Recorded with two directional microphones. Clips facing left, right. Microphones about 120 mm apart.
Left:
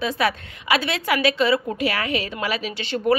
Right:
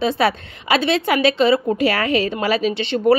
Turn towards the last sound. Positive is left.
turn(degrees=-25)  # may be behind; listen again after turning